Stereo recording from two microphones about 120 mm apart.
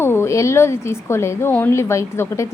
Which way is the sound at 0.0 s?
20° left (ahead or behind).